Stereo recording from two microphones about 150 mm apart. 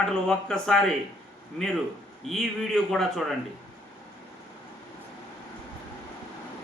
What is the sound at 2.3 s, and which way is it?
Speech, centre (ahead or behind).